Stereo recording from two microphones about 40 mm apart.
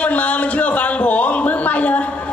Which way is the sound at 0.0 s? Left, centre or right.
Left.